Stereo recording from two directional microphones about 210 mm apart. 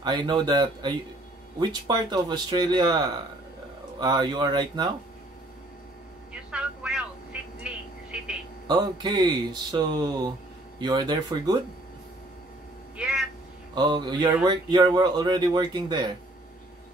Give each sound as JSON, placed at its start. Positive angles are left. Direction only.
{"t": 0.0, "sound": "speech", "side_deg": -20}
{"t": 6.5, "sound": "a sound", "side_deg": -5}
{"t": 7.6, "sound": "telephone", "side_deg": -5}
{"t": 8.6, "sound": "speech", "side_deg": -20}
{"t": 12.9, "sound": "cat", "side_deg": -5}
{"t": 13.7, "sound": "speech", "side_deg": -20}